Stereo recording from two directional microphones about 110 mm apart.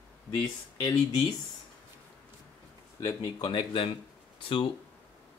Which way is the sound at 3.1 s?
40° left (ahead or behind).